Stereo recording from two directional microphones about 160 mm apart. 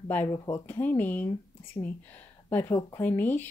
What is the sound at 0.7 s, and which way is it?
Speech, 10° left (ahead or behind).